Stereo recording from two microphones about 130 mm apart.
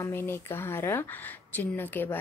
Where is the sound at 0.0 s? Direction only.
20° left (ahead or behind).